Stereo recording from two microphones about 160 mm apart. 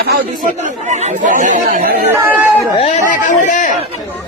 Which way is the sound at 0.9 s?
50° right (ahead or behind).